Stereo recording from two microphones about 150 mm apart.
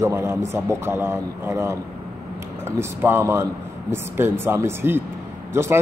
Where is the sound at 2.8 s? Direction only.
15° right (ahead or behind).